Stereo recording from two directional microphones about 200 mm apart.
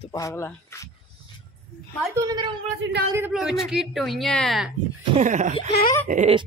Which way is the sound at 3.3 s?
Centre (ahead or behind).